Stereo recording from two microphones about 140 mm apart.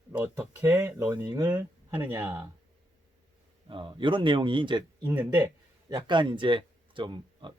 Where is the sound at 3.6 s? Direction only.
35° right (ahead or behind).